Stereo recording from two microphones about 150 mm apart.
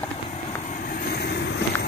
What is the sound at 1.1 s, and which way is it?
Vehicle, 90° left.